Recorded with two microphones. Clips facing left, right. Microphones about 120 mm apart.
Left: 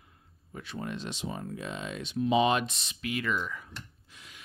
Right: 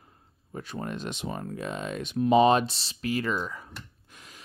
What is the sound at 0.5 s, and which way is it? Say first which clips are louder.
Speech: right 3 dB; 45° right (ahead or behind).